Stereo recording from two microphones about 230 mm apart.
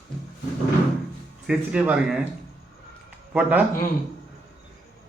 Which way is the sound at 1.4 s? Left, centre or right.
Centre.